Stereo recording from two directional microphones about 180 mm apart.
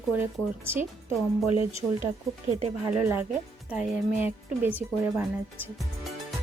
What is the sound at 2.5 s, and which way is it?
Speech, 35° right (ahead or behind).